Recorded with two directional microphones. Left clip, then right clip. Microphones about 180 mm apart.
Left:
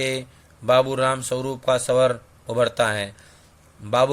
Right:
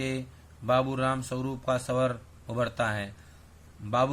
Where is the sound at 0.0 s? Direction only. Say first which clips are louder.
Left 9 dB; 35° left (ahead or behind).